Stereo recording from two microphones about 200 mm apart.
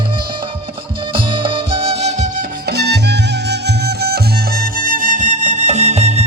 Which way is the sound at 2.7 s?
55° right (ahead or behind).